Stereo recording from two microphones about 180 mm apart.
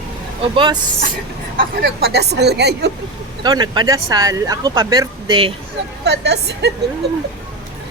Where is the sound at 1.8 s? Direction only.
65° right (ahead or behind).